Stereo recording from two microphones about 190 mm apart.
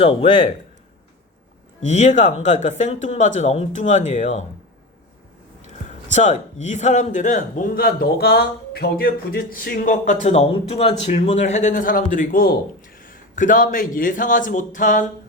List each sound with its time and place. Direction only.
0.0 s speech: 25° left (ahead or behind)
1.9 s speech: 40° left (ahead or behind)
5.6 s a man's voice: 40° left (ahead or behind)